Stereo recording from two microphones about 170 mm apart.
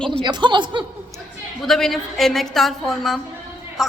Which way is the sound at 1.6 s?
Centre (ahead or behind).